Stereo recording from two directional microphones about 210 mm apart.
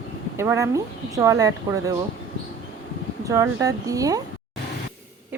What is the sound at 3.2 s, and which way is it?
Speech, 15° right (ahead or behind).